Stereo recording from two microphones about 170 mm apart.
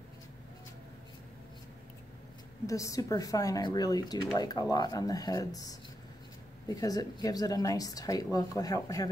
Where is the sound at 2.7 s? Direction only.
20° left (ahead or behind).